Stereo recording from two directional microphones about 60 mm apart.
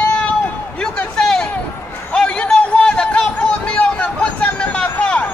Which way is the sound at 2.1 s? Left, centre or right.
Centre.